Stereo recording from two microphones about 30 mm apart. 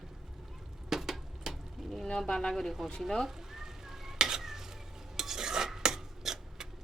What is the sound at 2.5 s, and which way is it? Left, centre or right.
Speech, centre.